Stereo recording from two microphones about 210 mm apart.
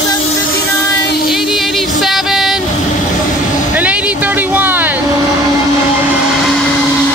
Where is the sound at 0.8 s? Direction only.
15° left (ahead or behind).